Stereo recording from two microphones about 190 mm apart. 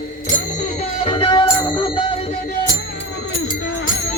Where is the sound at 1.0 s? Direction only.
30° left (ahead or behind).